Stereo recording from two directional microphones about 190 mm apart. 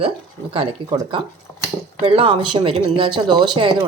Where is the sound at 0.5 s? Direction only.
25° right (ahead or behind).